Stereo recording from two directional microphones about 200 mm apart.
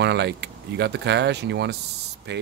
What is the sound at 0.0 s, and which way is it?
Speech, 60° right (ahead or behind).